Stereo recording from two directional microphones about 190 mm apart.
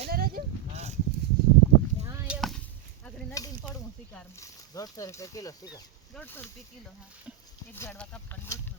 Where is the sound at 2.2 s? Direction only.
Centre (ahead or behind).